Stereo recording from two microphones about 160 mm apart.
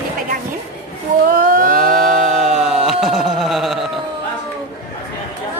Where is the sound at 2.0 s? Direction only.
Centre (ahead or behind).